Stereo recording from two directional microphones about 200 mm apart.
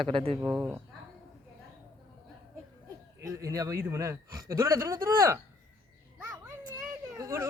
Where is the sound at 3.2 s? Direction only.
15° right (ahead or behind).